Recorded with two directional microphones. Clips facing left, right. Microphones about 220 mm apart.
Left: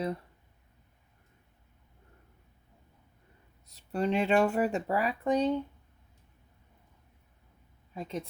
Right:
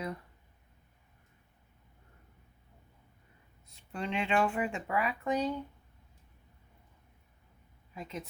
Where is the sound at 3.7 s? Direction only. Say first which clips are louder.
Left 7 dB; 40° left (ahead or behind).